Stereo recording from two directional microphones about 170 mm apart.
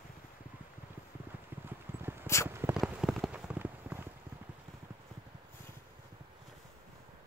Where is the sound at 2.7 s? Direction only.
Centre (ahead or behind).